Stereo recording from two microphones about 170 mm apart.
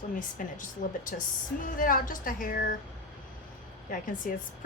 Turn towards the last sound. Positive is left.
turn(degrees=50)  # may be behind; listen again after turning